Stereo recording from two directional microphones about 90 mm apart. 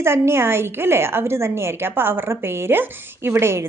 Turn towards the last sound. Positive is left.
turn(degrees=-30)  # may be behind; listen again after turning